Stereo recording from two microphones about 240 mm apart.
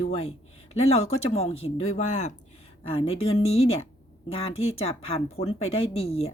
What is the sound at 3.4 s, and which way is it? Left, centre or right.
Speech, left.